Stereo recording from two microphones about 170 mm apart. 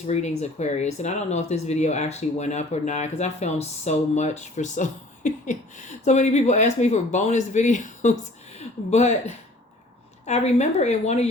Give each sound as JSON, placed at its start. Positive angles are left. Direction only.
{"t": 0.1, "sound": "speech", "side_deg": 40}